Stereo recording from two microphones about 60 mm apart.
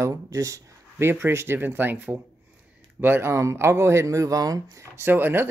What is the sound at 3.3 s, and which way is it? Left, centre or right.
Speech, right.